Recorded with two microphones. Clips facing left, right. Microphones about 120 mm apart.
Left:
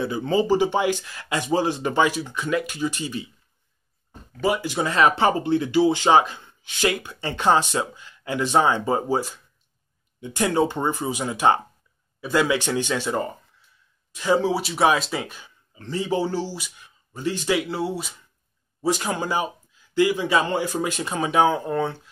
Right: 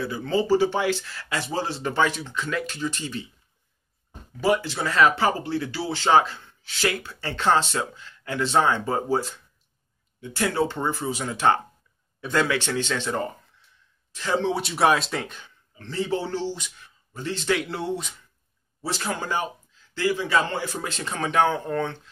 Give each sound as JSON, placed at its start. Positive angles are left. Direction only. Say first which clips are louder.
{"t": 0.0, "sound": "speech", "louder": "left 3 dB", "side_deg": 20}
{"t": 4.6, "sound": "speech", "louder": "left 1 dB", "side_deg": 15}